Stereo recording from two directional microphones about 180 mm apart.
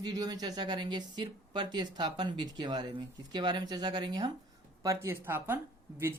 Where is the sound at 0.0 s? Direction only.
20° right (ahead or behind).